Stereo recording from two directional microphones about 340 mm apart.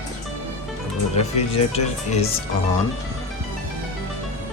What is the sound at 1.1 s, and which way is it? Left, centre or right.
Speech, centre.